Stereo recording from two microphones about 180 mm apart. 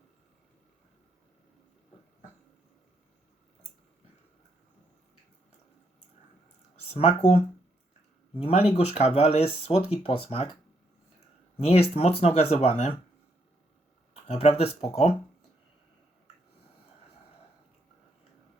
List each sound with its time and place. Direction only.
6.9 s speech: 40° left (ahead or behind)
11.6 s speech: 35° left (ahead or behind)
14.1 s a sound: 35° left (ahead or behind)
14.6 s speech: 35° left (ahead or behind)